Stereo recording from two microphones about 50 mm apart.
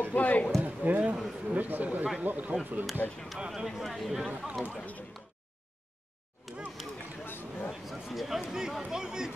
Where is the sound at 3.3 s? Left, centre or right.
Centre.